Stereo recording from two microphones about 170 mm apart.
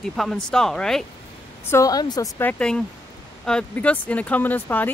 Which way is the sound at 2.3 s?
10° left (ahead or behind).